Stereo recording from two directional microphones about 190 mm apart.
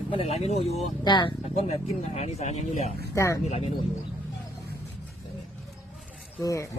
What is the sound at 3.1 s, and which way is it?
Speech, 15° left (ahead or behind).